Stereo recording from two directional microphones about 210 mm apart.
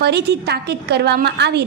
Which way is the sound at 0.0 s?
50° right (ahead or behind).